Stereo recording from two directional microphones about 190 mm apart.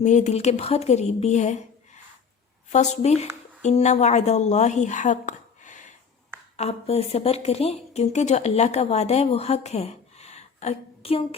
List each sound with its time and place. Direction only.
0.0 s speech: 40° left (ahead or behind)
2.7 s a woman's voice: 35° left (ahead or behind)